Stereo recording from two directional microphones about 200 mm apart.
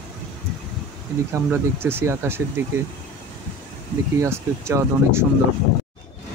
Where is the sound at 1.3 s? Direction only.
10° right (ahead or behind).